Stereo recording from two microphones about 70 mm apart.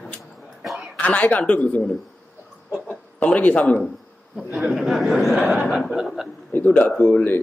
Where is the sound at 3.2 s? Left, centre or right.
Left.